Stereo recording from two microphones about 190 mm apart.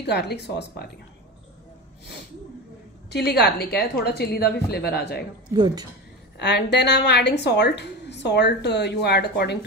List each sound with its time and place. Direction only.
0.0 s a woman's voice: 60° left (ahead or behind)
3.1 s a woman's voice: 60° left (ahead or behind)
5.5 s a woman's voice: 20° right (ahead or behind)
6.3 s a woman's voice: 65° left (ahead or behind)